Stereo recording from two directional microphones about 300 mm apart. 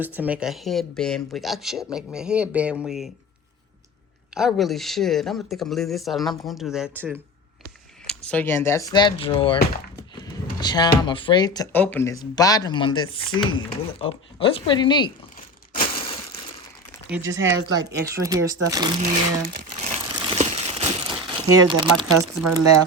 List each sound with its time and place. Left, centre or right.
0.0 s speech: centre
4.4 s speech: centre
10.6 s speech: centre
17.1 s speech: centre
17.5 s speech: right
18.0 s speech: centre
19.8 s crumpling: centre